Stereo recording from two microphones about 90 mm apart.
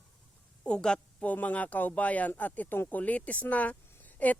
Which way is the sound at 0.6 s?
10° left (ahead or behind).